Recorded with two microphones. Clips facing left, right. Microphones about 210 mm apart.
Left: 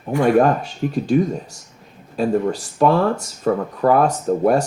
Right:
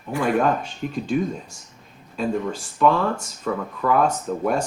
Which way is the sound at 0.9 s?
40° left (ahead or behind).